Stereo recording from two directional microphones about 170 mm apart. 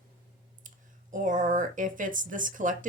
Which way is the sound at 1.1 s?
50° right (ahead or behind).